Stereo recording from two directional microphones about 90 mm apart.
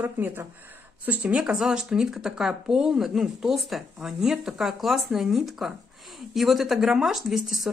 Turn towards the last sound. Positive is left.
turn(degrees=0)  # may be behind; listen again after turning